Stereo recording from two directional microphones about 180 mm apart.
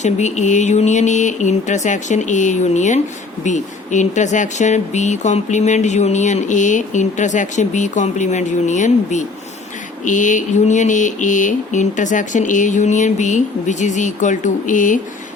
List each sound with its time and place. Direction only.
0.0 s speech: 40° left (ahead or behind)
10.1 s mantra: 45° left (ahead or behind)